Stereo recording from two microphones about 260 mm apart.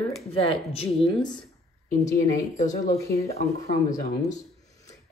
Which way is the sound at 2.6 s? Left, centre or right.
Left.